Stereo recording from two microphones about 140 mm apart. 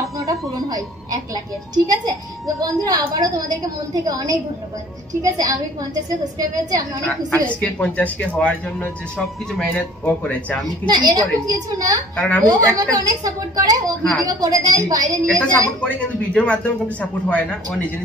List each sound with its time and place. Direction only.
0.0 s a sound: 25° right (ahead or behind)
0.5 s a woman's voice: 25° right (ahead or behind)
7.4 s speech: 10° left (ahead or behind)
10.9 s a woman's voice: 30° right (ahead or behind)
12.2 s speech: 10° left (ahead or behind)
12.4 s a woman's voice: 25° right (ahead or behind)
15.2 s speech: 10° left (ahead or behind)